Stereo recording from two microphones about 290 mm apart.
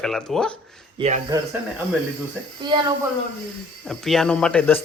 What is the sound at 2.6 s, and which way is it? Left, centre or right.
Speech, centre.